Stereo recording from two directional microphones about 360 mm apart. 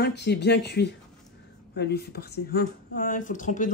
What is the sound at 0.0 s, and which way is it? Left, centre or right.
A woman's voice, left.